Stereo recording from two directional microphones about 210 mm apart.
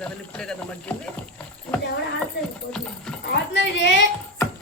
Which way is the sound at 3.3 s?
55° left (ahead or behind).